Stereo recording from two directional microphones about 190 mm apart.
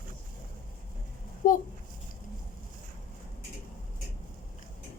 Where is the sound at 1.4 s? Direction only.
45° left (ahead or behind).